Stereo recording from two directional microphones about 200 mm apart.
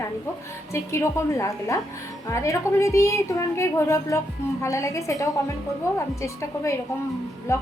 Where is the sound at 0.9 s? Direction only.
15° left (ahead or behind).